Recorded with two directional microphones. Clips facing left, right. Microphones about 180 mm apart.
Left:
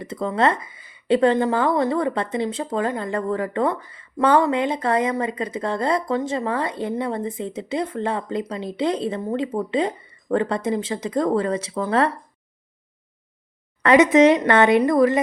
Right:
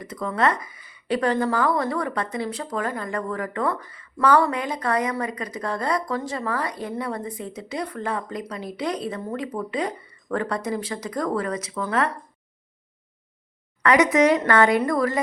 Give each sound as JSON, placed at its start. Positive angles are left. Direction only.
{"t": 0.0, "sound": "speech", "side_deg": 25}
{"t": 13.8, "sound": "speech", "side_deg": 25}